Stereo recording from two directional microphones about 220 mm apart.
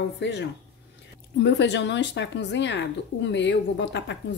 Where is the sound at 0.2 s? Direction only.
50° left (ahead or behind).